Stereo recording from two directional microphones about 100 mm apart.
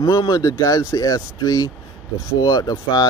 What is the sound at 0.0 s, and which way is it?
Speech, 40° left (ahead or behind).